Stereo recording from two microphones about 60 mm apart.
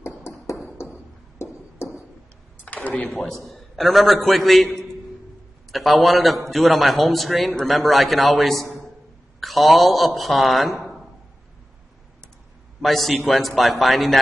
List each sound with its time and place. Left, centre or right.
1.4 s a sound: left
2.6 s speech: left
3.4 s a man's voice: centre
8.6 s a sound: centre
9.4 s a man's voice: centre
12.8 s a man's voice: centre